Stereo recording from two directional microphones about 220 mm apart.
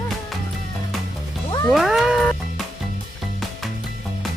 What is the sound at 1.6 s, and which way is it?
Cat, centre (ahead or behind).